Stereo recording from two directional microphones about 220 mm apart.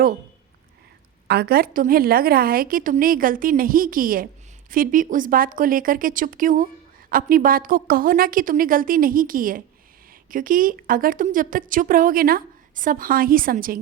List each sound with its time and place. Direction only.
1.3 s a woman's voice: 45° right (ahead or behind)